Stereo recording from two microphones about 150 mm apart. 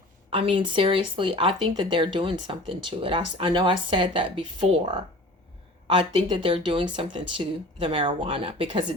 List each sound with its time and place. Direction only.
0.3 s speech: 35° right (ahead or behind)